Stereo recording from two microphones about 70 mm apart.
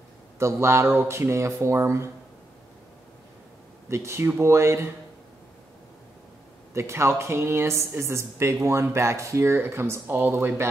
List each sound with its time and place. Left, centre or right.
0.4 s speech: right
3.9 s speech: right
6.7 s speech: right